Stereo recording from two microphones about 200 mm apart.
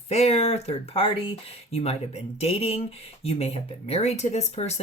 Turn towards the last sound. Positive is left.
turn(degrees=35)  # may be behind; listen again after turning